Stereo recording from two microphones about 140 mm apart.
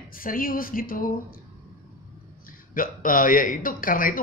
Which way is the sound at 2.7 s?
80° left.